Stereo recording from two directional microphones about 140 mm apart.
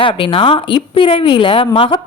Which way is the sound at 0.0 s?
40° left (ahead or behind).